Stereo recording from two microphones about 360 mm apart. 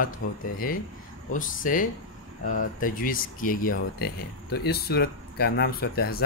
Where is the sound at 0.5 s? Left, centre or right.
Left.